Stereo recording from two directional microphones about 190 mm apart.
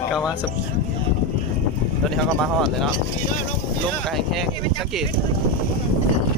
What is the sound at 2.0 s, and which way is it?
Speech, centre (ahead or behind).